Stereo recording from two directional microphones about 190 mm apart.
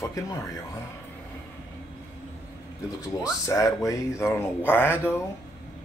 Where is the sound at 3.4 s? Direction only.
15° left (ahead or behind).